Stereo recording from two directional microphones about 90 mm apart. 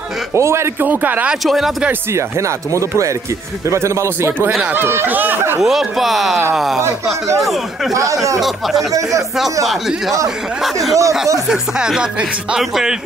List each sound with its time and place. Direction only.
0.3 s speech: 30° right (ahead or behind)
0.8 s speech: 20° right (ahead or behind)
1.4 s speech: centre (ahead or behind)
1.9 s speech: 35° right (ahead or behind)
4.5 s speech: 5° right (ahead or behind)
4.7 s speech: 25° right (ahead or behind)
5.6 s speech: 5° right (ahead or behind)
7.9 s speech: 40° right (ahead or behind)
8.4 s speech: centre (ahead or behind)